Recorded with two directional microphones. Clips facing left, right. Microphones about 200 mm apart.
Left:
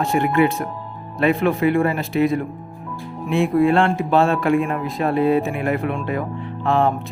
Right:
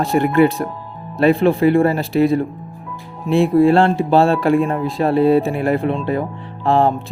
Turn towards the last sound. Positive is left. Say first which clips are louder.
# right 3 dB
turn(degrees=-35)  # may be behind; listen again after turning